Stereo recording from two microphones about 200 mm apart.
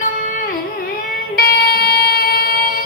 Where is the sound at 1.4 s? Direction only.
50° left (ahead or behind).